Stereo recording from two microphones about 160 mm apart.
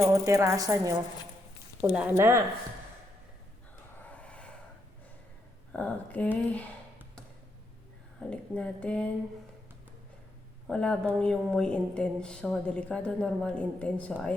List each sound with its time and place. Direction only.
0.0 s speech: 20° right (ahead or behind)
3.9 s a sound: 10° left (ahead or behind)
5.7 s a woman's voice: 10° left (ahead or behind)
8.2 s a woman's voice: 5° left (ahead or behind)
10.7 s a woman's voice: 5° left (ahead or behind)